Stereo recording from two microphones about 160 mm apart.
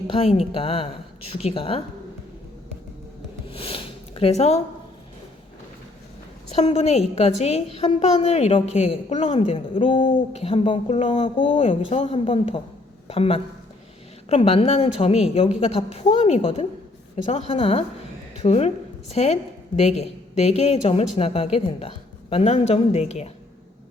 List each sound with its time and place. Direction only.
0.1 s a woman's voice: 40° left (ahead or behind)
3.5 s sniff: 35° left (ahead or behind)
6.6 s a woman's voice: 40° left (ahead or behind)